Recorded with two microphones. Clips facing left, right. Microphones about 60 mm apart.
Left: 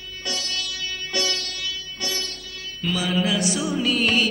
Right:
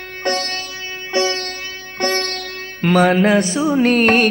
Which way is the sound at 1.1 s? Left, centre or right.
Right.